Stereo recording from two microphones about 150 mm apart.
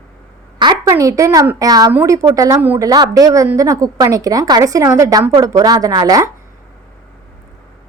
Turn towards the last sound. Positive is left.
turn(degrees=-25)  # may be behind; listen again after turning